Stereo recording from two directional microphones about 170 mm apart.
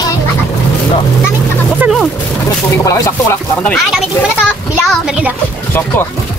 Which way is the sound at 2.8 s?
15° left (ahead or behind).